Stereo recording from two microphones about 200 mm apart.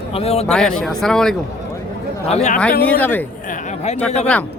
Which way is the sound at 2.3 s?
30° left (ahead or behind).